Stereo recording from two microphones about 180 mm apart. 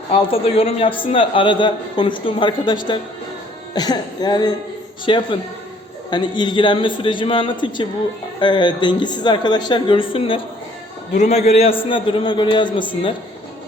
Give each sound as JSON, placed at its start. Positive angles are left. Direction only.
{"t": 0.1, "sound": "a man's voice", "side_deg": 30}